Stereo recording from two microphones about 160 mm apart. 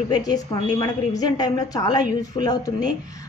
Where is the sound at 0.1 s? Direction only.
25° left (ahead or behind).